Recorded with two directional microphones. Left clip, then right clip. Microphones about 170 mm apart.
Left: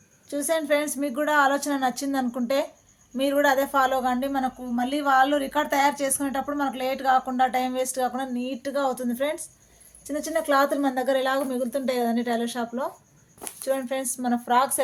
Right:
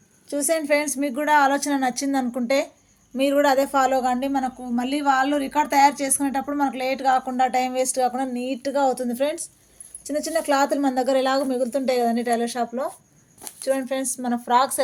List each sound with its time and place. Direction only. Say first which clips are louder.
0.3 s a woman's voice: right 2 dB; 15° right (ahead or behind)